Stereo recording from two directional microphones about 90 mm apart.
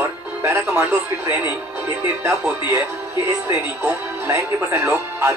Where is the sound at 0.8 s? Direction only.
20° right (ahead or behind).